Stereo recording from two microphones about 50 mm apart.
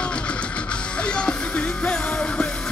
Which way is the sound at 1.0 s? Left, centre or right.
Centre.